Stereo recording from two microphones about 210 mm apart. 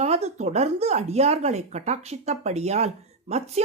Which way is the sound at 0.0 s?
30° right (ahead or behind).